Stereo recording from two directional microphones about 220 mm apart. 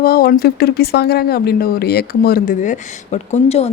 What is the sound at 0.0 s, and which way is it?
Speech, 45° left (ahead or behind).